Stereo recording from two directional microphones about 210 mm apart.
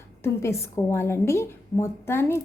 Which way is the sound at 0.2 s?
15° left (ahead or behind).